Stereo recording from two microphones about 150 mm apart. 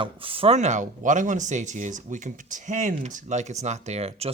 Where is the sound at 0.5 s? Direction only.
50° right (ahead or behind).